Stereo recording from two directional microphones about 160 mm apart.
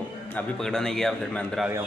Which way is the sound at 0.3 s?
5° left (ahead or behind).